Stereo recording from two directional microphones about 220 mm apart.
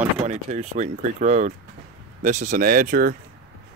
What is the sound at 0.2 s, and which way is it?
Speech, 30° right (ahead or behind).